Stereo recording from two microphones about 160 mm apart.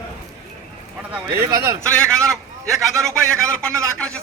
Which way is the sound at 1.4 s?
20° right (ahead or behind).